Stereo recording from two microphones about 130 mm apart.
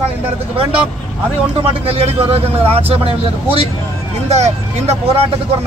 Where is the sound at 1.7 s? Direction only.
50° right (ahead or behind).